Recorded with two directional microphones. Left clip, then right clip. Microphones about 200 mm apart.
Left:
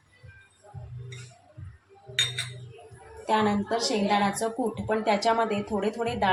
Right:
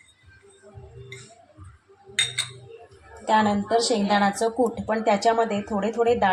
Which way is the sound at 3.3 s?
30° right (ahead or behind).